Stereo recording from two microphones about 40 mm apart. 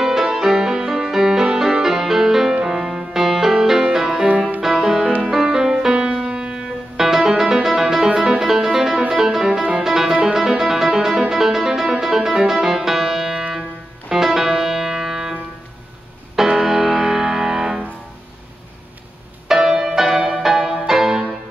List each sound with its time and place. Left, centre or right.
0.0 s music: centre
5.9 s music: right
7.2 s music: centre
14.1 s music: centre
16.3 s music: centre
19.4 s music: centre